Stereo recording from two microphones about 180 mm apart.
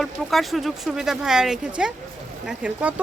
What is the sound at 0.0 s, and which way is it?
A woman's voice, centre (ahead or behind).